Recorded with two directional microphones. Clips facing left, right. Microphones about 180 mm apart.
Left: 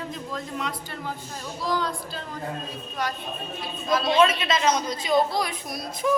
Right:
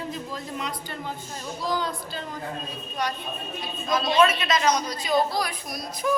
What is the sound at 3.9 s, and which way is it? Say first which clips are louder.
A man's voice: left 1 dB; 25° left (ahead or behind).